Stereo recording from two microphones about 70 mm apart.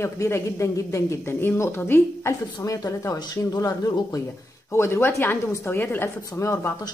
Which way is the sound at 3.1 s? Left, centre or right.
Left.